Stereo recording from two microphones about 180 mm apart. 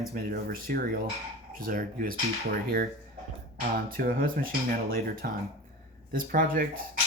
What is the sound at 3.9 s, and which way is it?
Speech, 50° right (ahead or behind).